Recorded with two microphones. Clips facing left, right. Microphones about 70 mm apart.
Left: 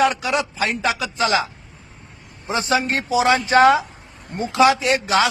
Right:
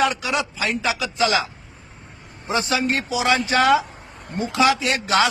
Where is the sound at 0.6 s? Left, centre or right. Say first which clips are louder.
Left 2 dB; left.